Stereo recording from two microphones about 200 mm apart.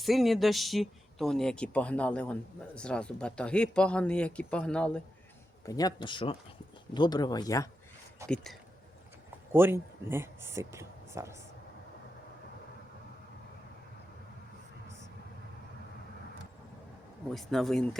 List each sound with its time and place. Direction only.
0.0 s speech: centre (ahead or behind)
5.6 s speech: 20° left (ahead or behind)
8.2 s speech: 15° right (ahead or behind)
9.5 s speech: 10° right (ahead or behind)
17.3 s speech: centre (ahead or behind)